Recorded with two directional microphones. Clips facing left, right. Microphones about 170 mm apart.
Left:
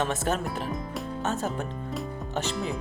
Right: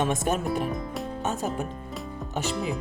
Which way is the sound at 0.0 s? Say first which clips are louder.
Right 2 dB; 15° right (ahead or behind).